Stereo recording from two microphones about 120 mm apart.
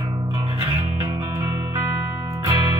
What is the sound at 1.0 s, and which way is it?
Music, 25° right (ahead or behind).